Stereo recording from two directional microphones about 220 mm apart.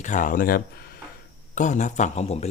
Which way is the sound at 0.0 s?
35° left (ahead or behind).